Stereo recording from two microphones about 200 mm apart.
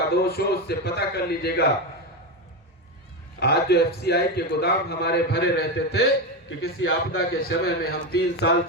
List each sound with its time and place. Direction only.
0.1 s a man's voice: 50° left (ahead or behind)
3.4 s a man's voice: 55° left (ahead or behind)
6.6 s a man's voice: 90° left
7.3 s a man's voice: 50° left (ahead or behind)